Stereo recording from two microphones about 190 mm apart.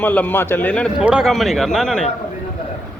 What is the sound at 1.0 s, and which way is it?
A man's voice, 5° right (ahead or behind).